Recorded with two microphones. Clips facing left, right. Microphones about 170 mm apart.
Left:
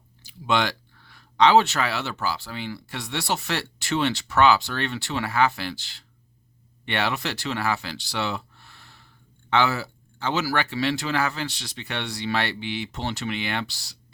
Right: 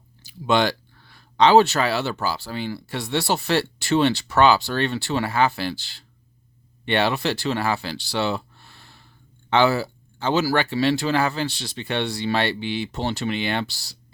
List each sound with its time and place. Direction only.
0.3 s speech: 35° right (ahead or behind)